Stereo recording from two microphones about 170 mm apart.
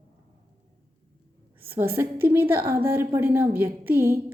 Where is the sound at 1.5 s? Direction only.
15° right (ahead or behind).